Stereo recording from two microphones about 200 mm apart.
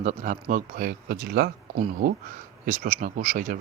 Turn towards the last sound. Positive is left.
turn(degrees=-40)  # may be behind; listen again after turning